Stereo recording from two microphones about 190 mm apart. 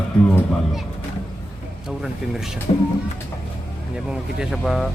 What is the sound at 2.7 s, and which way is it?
Speech, 30° left (ahead or behind).